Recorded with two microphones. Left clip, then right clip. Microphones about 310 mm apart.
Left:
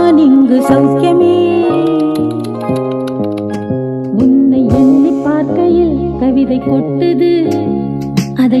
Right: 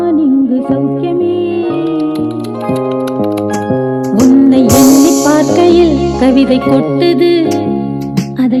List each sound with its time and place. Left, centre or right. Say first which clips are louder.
0.0 s music: left 3 dB; left
0.4 s music: left 4 dB; left
0.9 s music: left 4 dB; left
4.1 s music: right 2 dB; right; by 7.5 s centre